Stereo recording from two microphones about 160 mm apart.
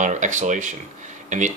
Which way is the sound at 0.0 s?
50° right (ahead or behind).